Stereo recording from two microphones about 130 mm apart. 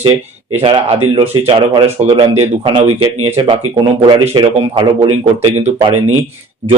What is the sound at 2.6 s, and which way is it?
Speech, 45° right (ahead or behind).